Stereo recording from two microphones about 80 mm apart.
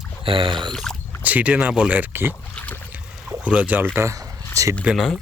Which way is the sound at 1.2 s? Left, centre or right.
Centre.